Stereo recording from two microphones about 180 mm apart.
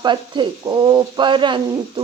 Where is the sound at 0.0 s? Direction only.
25° right (ahead or behind).